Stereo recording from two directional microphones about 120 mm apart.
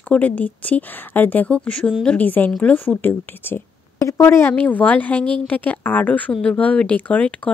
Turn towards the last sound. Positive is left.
turn(degrees=10)  # may be behind; listen again after turning